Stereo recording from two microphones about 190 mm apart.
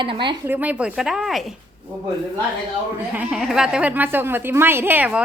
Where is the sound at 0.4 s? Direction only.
10° right (ahead or behind).